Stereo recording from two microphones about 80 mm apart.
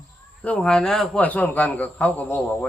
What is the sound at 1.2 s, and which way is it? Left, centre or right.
Speech, left.